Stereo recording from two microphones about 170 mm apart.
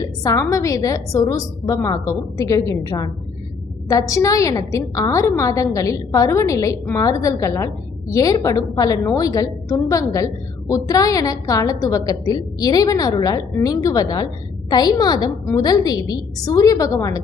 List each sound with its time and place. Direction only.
0.0 s a woman's voice: 20° left (ahead or behind)